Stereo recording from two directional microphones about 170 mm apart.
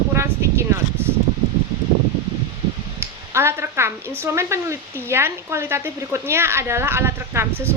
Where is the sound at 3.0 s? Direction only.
15° right (ahead or behind).